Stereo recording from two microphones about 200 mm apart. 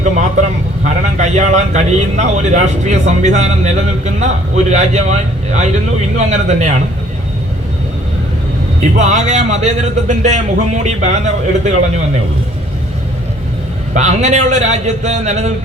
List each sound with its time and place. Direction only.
0.0 s a sound: 35° right (ahead or behind)
0.9 s a man's voice: 35° right (ahead or behind)
8.8 s a man's voice: 35° right (ahead or behind)
13.9 s a man's voice: 35° right (ahead or behind)